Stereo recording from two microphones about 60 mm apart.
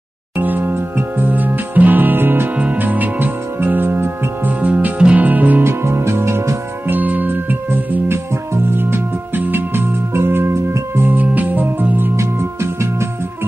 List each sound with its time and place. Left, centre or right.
0.4 s music: right
2.5 s music: right
5.6 s music: right
6.9 s music: right
11.1 s music: right
12.2 s music: right